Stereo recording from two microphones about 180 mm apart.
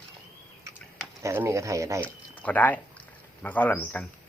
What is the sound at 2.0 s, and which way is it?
Speech, 10° left (ahead or behind).